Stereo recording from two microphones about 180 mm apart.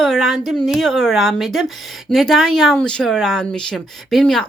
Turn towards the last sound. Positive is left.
turn(degrees=5)  # may be behind; listen again after turning